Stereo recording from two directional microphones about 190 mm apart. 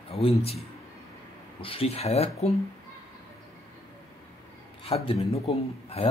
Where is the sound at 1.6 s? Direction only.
30° left (ahead or behind).